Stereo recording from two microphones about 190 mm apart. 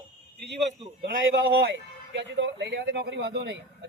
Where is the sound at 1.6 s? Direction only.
65° right (ahead or behind).